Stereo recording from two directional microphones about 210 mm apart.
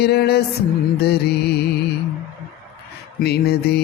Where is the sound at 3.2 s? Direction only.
50° left (ahead or behind).